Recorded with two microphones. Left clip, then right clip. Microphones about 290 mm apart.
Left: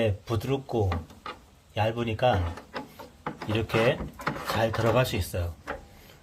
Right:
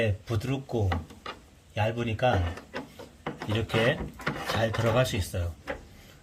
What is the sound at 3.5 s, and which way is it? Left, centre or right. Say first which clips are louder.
Speech: left 2 dB; left.